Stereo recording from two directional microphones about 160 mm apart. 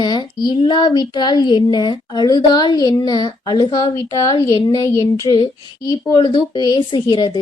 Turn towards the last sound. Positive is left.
turn(degrees=30)  # may be behind; listen again after turning